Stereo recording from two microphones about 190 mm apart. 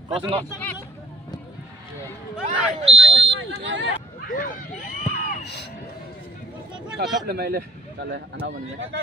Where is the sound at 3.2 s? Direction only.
70° right (ahead or behind).